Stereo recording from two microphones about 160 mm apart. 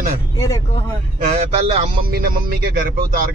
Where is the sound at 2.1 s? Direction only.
70° right (ahead or behind).